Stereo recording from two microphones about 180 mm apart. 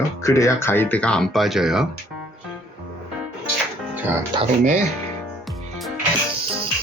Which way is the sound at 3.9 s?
10° right (ahead or behind).